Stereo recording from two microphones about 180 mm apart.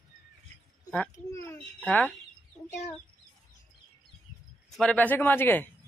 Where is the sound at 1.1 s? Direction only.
15° left (ahead or behind).